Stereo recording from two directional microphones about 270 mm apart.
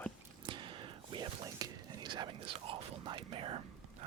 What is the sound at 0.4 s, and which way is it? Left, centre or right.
Whispering, centre.